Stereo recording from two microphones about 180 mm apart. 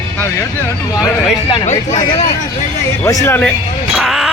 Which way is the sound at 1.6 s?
40° left (ahead or behind).